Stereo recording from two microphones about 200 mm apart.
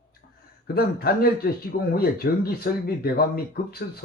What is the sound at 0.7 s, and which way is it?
Speech, 50° left (ahead or behind).